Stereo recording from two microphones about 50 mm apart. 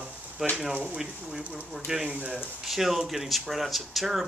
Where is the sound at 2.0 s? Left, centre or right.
Right.